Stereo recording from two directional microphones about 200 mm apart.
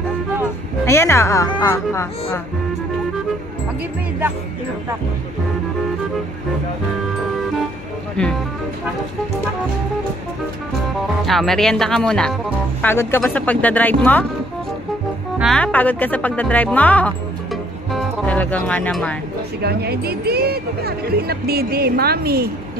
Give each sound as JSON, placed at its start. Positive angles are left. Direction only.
{"t": 0.8, "sound": "speech", "side_deg": 15}
{"t": 11.2, "sound": "speech", "side_deg": 0}
{"t": 15.3, "sound": "speech", "side_deg": 0}
{"t": 17.9, "sound": "music", "side_deg": 5}
{"t": 18.7, "sound": "speech", "side_deg": 5}
{"t": 19.6, "sound": "speech", "side_deg": -50}